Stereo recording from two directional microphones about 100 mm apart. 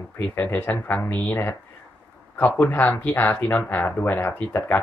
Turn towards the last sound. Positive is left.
turn(degrees=20)  # may be behind; listen again after turning